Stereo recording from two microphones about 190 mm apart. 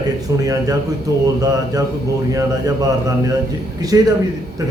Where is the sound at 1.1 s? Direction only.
20° right (ahead or behind).